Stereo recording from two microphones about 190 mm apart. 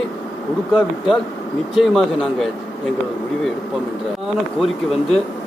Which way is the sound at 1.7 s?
Centre (ahead or behind).